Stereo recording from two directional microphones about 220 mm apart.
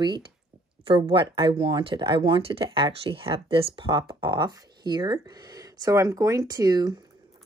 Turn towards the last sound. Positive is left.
turn(degrees=-15)  # may be behind; listen again after turning